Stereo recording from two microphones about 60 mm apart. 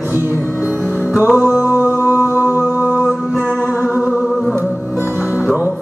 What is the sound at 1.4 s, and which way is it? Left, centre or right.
Music, right.